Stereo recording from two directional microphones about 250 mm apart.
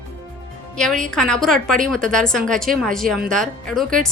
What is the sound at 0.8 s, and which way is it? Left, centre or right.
A woman's voice, centre.